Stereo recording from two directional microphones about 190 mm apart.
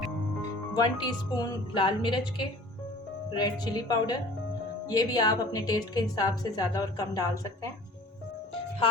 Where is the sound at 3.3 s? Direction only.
20° left (ahead or behind).